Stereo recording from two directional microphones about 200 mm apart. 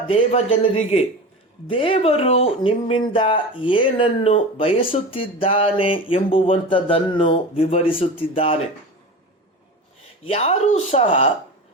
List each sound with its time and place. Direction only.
0.1 s speech: 30° left (ahead or behind)
10.2 s speech: 30° left (ahead or behind)